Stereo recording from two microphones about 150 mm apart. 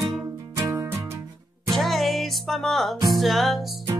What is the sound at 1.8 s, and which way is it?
Music, centre (ahead or behind).